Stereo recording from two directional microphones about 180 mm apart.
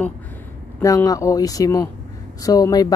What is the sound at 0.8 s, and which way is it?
Speech, 20° left (ahead or behind).